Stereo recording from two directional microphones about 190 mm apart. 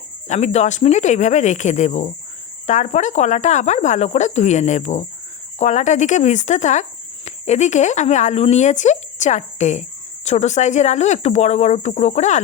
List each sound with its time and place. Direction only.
0.3 s speech: 35° left (ahead or behind)